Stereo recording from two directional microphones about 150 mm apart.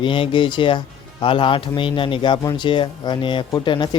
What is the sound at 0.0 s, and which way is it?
Speech, 35° left (ahead or behind).